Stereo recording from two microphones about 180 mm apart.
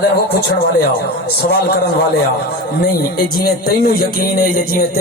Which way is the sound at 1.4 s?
60° left (ahead or behind).